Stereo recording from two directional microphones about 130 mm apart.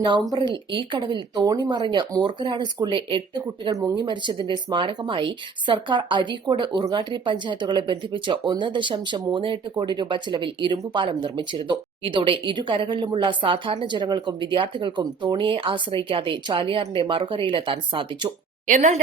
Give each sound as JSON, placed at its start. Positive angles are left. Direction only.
{"t": 0.0, "sound": "speech", "side_deg": -35}
{"t": 18.7, "sound": "a woman's voice", "side_deg": -60}